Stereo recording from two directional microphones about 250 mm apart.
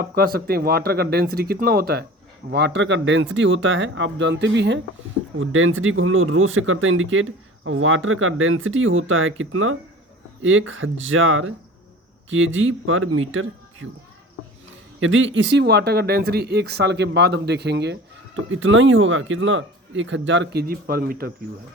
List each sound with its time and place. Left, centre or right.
0.0 s speech: right
15.0 s speech: right